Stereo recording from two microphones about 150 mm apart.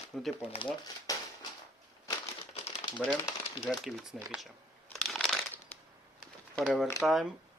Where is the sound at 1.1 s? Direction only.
25° left (ahead or behind).